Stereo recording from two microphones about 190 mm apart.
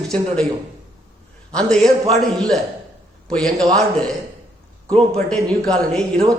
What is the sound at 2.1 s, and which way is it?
Speech, centre (ahead or behind).